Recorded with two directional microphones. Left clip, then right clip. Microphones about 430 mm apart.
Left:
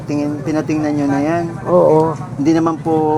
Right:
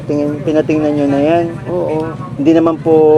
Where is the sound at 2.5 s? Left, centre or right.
Centre.